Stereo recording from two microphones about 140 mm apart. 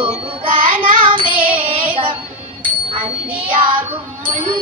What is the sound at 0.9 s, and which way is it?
Child singing, 35° right (ahead or behind).